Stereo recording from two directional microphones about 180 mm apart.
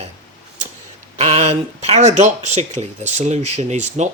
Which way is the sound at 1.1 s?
35° right (ahead or behind).